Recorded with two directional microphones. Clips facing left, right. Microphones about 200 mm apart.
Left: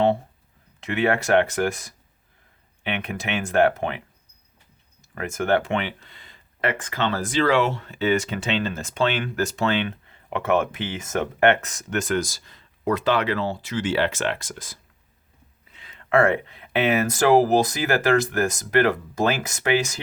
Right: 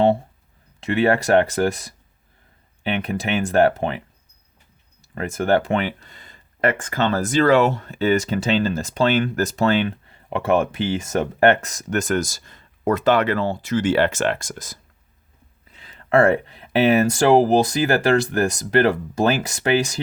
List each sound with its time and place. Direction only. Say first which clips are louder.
0.8 s speech: right 4 dB; 35° right (ahead or behind)
5.1 s speech: right 3 dB; 35° right (ahead or behind)